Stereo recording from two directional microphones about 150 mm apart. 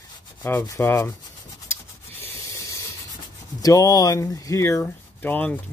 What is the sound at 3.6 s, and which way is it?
Speech, 25° left (ahead or behind).